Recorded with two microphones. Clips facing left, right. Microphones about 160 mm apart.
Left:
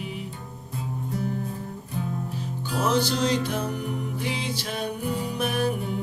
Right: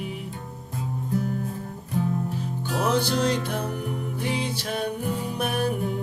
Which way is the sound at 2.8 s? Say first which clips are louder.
Even; 55° right (ahead or behind).